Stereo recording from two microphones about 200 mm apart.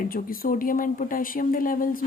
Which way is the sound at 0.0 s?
45° left (ahead or behind).